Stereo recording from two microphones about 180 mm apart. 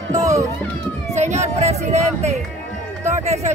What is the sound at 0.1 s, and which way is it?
Music, 15° right (ahead or behind).